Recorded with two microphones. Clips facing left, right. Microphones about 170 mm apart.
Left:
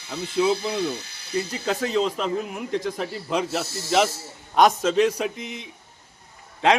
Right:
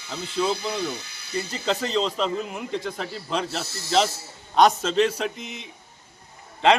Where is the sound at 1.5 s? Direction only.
5° left (ahead or behind).